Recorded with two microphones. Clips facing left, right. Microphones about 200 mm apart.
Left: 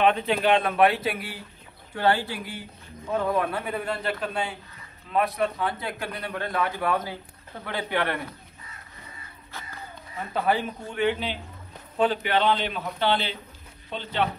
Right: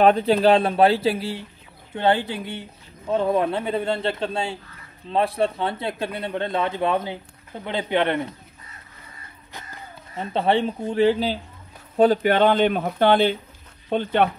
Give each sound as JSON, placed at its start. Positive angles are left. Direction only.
{"t": 0.0, "sound": "a man's voice", "side_deg": -35}
{"t": 10.1, "sound": "a man's voice", "side_deg": -25}